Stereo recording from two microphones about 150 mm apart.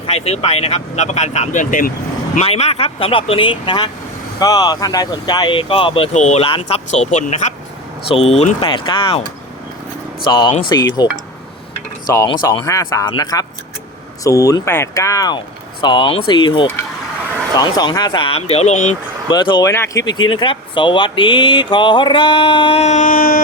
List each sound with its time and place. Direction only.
0.0 s speech: 45° left (ahead or behind); by 1.9 s 60° left (ahead or behind)
2.4 s speech: 45° left (ahead or behind)
6.1 s speech: 50° left (ahead or behind)
8.0 s speech: 40° left (ahead or behind)
8.6 s speech: 30° left (ahead or behind)
10.2 s speech: 30° left (ahead or behind); by 18.9 s 50° left (ahead or behind)
19.3 s speech: 30° left (ahead or behind)
19.6 s speech: 20° left (ahead or behind); by 23.4 s 65° left (ahead or behind)